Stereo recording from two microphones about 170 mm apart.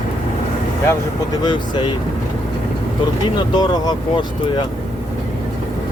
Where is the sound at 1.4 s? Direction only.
25° left (ahead or behind).